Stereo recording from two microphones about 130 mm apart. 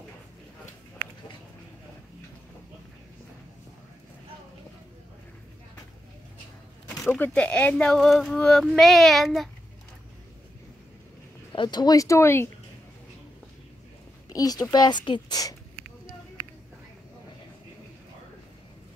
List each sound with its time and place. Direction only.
7.1 s speech: 10° left (ahead or behind)
11.5 s speech: 35° left (ahead or behind); by 12.4 s 20° left (ahead or behind)
14.3 s a woman's voice: 30° left (ahead or behind)